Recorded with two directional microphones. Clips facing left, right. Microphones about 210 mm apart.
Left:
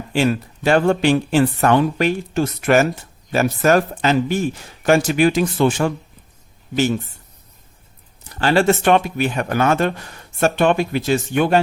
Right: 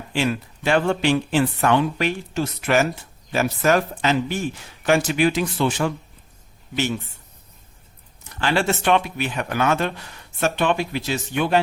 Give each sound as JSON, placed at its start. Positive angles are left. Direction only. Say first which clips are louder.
{"t": 0.1, "sound": "speech", "louder": "left 5 dB", "side_deg": 45}
{"t": 8.4, "sound": "speech", "louder": "left 6 dB", "side_deg": 40}